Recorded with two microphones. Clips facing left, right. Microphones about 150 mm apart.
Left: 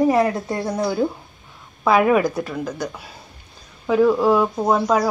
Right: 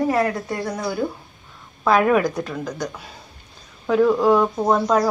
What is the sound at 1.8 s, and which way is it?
A woman's voice, 5° left (ahead or behind).